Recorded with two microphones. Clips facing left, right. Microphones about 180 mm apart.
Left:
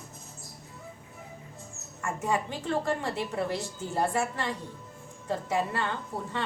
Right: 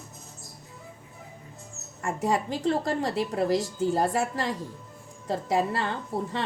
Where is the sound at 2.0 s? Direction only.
35° right (ahead or behind).